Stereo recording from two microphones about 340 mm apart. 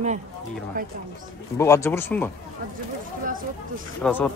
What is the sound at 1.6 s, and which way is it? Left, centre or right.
Speech, centre.